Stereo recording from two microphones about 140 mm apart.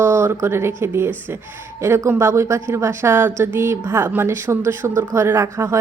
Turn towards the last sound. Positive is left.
turn(degrees=-20)  # may be behind; listen again after turning